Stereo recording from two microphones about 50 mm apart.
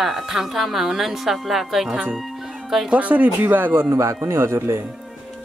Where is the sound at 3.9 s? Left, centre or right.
Right.